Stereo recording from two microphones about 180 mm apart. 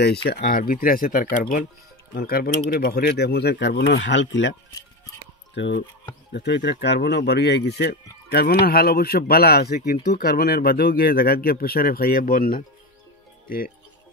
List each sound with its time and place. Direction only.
0.0 s speech: 65° left (ahead or behind); by 4.6 s 90° left
5.5 s speech: 80° left
7.9 s speech: 55° left (ahead or behind)